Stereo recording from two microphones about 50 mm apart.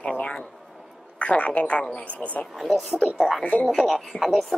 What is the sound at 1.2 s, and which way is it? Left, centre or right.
A woman's voice, left.